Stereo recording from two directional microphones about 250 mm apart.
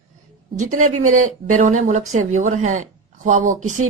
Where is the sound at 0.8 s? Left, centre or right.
Right.